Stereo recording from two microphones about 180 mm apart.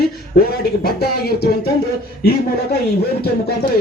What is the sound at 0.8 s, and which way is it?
Speech, 60° left (ahead or behind).